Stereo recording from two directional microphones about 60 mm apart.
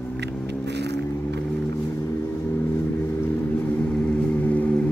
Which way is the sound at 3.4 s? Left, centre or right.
Left.